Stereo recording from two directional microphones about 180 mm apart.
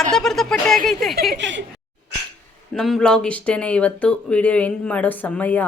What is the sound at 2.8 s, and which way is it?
Speech, centre (ahead or behind).